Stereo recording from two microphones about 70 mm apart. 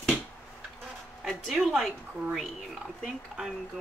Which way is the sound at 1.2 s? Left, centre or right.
Centre.